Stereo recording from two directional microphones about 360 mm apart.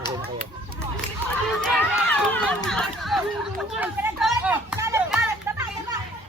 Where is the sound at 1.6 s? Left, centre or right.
Centre.